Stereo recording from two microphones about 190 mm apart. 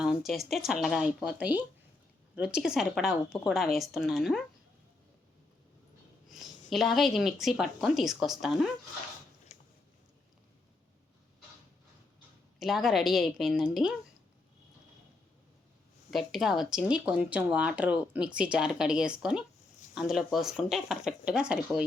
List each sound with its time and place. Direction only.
0.0 s speech: centre (ahead or behind)
6.7 s speech: centre (ahead or behind)
9.5 s a sound: 35° left (ahead or behind)
12.5 s speech: centre (ahead or behind)
16.1 s speech: centre (ahead or behind)